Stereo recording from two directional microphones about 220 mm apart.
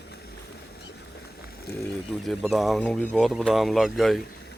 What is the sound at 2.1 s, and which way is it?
Speech, centre (ahead or behind).